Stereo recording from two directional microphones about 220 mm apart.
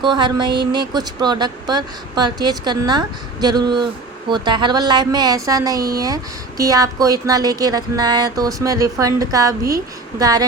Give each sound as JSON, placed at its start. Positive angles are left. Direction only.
{"t": 0.0, "sound": "speech", "side_deg": -20}